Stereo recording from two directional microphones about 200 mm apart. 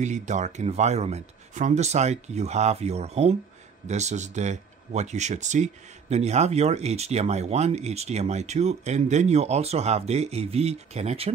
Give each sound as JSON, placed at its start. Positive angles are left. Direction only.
{"t": 0.0, "sound": "speech", "side_deg": -35}